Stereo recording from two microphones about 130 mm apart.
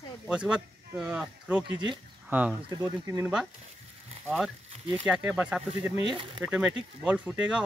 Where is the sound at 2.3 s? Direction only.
10° right (ahead or behind).